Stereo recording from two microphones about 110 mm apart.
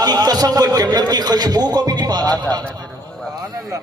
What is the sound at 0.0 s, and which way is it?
A man's voice, 35° right (ahead or behind).